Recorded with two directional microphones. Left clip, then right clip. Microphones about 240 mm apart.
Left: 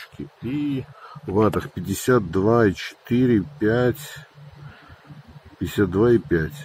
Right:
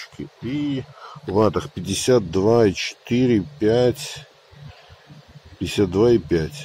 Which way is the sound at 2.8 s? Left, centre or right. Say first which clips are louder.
Right 1 dB; left.